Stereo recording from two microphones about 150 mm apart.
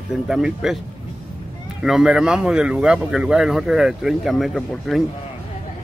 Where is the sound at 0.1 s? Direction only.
5° right (ahead or behind).